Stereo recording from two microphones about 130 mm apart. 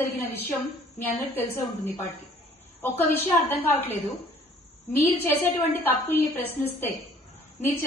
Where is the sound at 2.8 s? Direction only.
15° left (ahead or behind).